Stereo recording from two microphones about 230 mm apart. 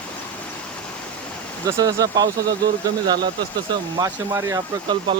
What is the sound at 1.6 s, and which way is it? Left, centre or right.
Speech, centre.